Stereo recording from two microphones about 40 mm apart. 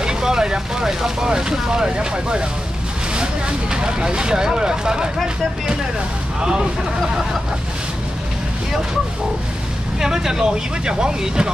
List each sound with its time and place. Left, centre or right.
0.0 s speech: centre
6.4 s speech: centre
9.9 s speech: centre